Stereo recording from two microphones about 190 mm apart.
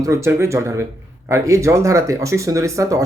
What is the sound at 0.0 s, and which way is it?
Speech, 15° right (ahead or behind).